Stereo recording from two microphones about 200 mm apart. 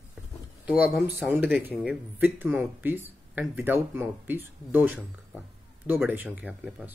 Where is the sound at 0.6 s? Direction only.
5° right (ahead or behind).